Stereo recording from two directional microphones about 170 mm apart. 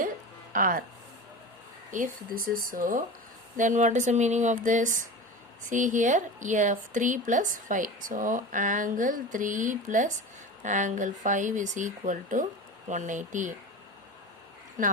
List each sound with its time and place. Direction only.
0.5 s speech: 55° right (ahead or behind)
1.9 s a woman's voice: 55° right (ahead or behind)
14.8 s a woman's voice: 50° right (ahead or behind)